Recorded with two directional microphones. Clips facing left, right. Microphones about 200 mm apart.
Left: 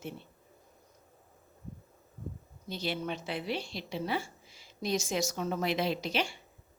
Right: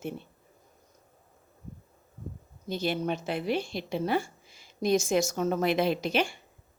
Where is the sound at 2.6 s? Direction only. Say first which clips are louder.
Right 6 dB; 50° right (ahead or behind).